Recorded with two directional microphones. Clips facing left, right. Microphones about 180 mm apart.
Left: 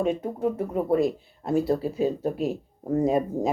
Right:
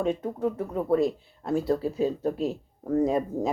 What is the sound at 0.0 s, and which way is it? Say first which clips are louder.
Speech: left 2 dB; 15° left (ahead or behind).